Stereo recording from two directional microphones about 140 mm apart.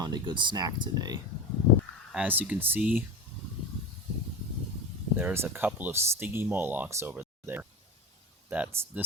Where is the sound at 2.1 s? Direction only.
10° right (ahead or behind).